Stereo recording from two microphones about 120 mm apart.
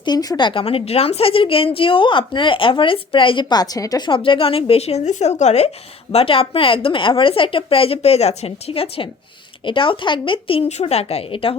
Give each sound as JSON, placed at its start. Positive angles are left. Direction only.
{"t": 0.0, "sound": "speech", "side_deg": 35}
{"t": 0.6, "sound": "a woman's voice", "side_deg": 55}
{"t": 10.7, "sound": "a woman's voice", "side_deg": 65}